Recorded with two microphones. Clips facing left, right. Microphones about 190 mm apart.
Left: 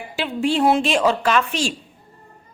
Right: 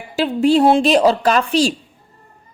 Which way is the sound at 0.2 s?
40° right (ahead or behind).